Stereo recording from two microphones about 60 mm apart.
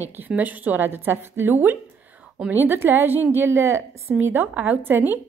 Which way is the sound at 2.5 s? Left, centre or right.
Right.